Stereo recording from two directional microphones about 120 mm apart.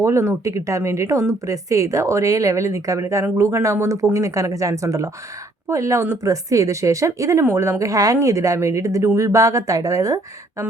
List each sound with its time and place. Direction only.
0.0 s speech: 25° right (ahead or behind)